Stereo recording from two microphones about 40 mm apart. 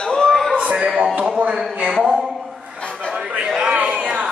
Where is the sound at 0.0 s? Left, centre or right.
Centre.